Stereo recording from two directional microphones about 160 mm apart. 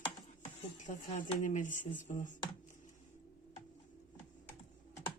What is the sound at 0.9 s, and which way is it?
Speech, 50° left (ahead or behind).